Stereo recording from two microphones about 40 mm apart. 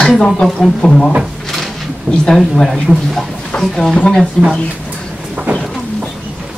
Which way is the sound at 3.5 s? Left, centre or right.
Centre.